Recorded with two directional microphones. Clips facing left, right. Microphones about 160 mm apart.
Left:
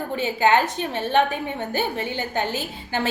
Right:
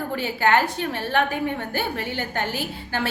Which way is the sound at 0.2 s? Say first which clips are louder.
Left 2 dB; 20° left (ahead or behind).